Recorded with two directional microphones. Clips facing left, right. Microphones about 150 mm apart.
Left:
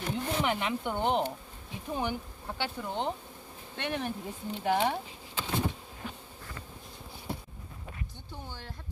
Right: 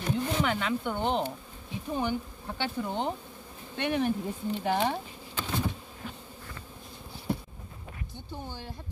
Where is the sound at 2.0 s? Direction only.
10° left (ahead or behind).